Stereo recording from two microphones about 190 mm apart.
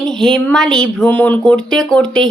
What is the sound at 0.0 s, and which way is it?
Speech, centre (ahead or behind).